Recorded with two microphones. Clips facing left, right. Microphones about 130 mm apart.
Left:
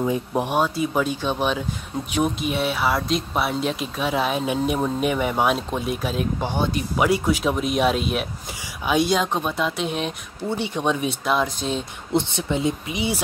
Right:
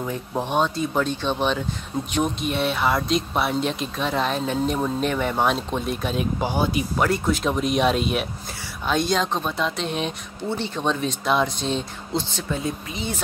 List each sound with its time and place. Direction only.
0.0 s speech: 15° left (ahead or behind); by 6.9 s 5° right (ahead or behind)
7.0 s speech: 10° left (ahead or behind)
12.1 s speech: 20° left (ahead or behind)